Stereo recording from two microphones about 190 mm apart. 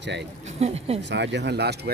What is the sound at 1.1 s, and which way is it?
Speech, 65° right (ahead or behind).